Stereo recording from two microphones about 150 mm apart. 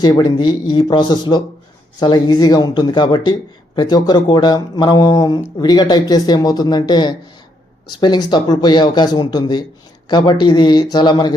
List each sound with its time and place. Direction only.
0.0 s speech: 25° left (ahead or behind)